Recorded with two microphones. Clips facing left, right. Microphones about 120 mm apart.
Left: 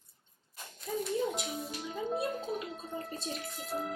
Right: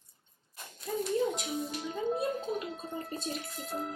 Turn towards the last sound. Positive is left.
turn(degrees=0)  # may be behind; listen again after turning